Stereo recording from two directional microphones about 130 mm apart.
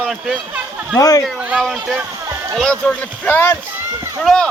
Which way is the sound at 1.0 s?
25° left (ahead or behind).